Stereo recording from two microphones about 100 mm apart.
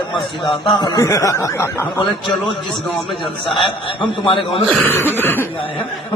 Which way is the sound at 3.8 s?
55° left (ahead or behind).